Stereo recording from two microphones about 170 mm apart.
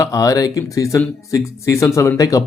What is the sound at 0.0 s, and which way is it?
Speech, 20° left (ahead or behind).